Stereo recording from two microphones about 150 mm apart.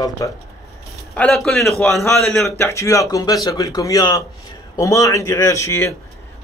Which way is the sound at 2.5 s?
20° left (ahead or behind).